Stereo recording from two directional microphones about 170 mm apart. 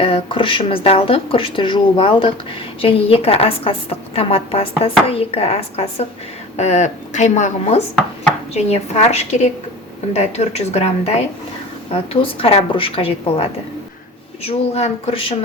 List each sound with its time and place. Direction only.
0.0 s a woman's voice: 35° left (ahead or behind)